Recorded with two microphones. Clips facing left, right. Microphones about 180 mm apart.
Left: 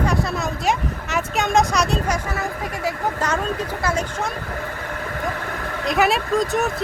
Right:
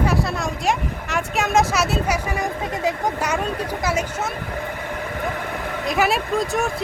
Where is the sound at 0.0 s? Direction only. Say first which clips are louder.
Even; centre (ahead or behind).